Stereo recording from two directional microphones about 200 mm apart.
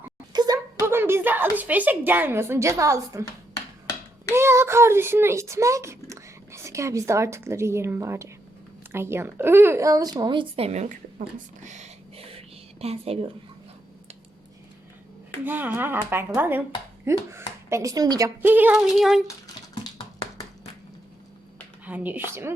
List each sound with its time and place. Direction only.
0.0 s speech: 20° right (ahead or behind)
4.4 s a woman's voice: 10° right (ahead or behind); by 13.3 s 30° right (ahead or behind)
15.4 s speech: 10° right (ahead or behind)
21.8 s speech: 10° right (ahead or behind)